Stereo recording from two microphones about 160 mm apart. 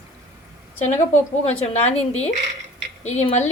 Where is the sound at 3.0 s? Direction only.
45° left (ahead or behind).